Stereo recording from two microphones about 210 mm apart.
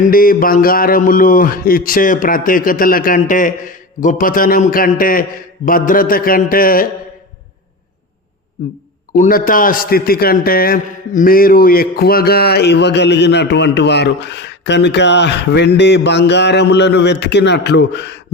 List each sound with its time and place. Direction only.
0.0 s a sound: 45° left (ahead or behind)
5.6 s a man's voice: 40° left (ahead or behind)
9.1 s a man's voice: 40° left (ahead or behind); by 18.2 s 55° left (ahead or behind)